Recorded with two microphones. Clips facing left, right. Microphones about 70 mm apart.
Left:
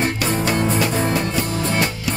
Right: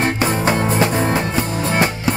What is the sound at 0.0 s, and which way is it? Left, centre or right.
Music, right.